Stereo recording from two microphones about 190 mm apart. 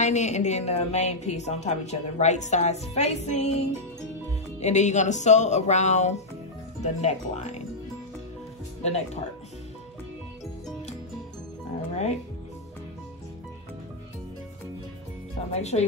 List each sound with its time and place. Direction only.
0.0 s a woman's voice: 40° left (ahead or behind)
8.8 s a woman's voice: 35° left (ahead or behind)
15.5 s a woman's voice: 35° left (ahead or behind)